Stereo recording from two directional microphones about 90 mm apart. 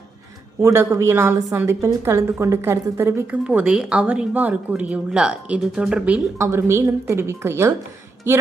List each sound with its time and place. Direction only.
0.6 s a woman's voice: 25° right (ahead or behind)
3.3 s a woman's voice: 15° right (ahead or behind)
6.4 s a woman's voice: 30° right (ahead or behind)